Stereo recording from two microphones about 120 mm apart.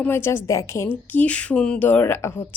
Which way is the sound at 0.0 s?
20° left (ahead or behind).